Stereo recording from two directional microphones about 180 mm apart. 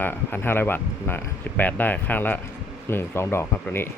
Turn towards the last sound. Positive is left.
turn(degrees=15)  # may be behind; listen again after turning